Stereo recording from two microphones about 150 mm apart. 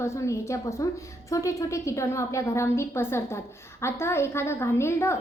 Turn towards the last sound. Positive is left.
turn(degrees=15)  # may be behind; listen again after turning